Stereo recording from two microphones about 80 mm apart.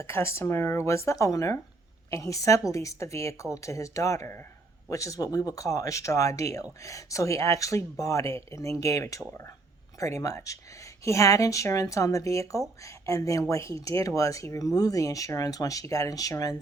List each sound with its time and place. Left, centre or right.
0.0 s speech: left